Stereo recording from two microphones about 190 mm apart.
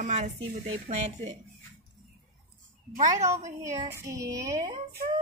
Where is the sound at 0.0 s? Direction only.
40° right (ahead or behind).